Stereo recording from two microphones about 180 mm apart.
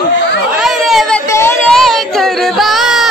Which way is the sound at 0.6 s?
Centre (ahead or behind).